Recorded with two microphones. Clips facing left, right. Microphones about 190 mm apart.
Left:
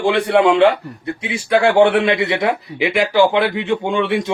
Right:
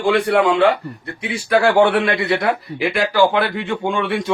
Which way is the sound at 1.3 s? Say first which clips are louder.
Left 1 dB; 20° left (ahead or behind).